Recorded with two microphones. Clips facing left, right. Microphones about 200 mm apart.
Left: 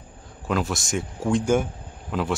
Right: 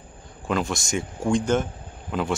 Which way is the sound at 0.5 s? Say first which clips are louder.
Even; centre (ahead or behind).